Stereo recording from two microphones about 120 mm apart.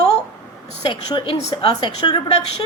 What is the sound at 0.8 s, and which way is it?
Speech, 45° left (ahead or behind).